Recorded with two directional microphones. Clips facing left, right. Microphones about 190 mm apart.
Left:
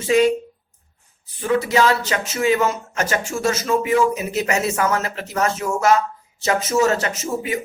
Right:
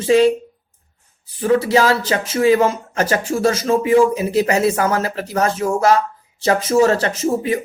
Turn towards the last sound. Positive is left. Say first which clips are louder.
# right 6 dB
turn(degrees=-35)  # may be behind; listen again after turning